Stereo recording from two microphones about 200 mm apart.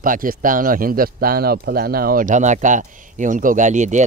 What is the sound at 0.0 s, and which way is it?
Speech, 45° right (ahead or behind).